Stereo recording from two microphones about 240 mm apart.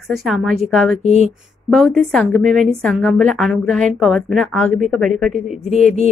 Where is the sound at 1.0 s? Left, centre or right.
Left.